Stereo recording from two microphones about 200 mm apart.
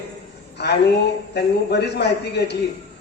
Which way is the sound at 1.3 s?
55° left (ahead or behind).